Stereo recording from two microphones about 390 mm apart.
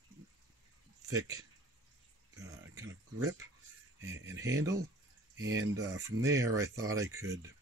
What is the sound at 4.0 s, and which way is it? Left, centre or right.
Speech, centre.